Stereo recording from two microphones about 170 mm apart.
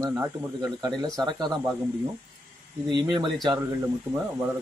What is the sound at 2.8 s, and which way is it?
Speech, 25° right (ahead or behind).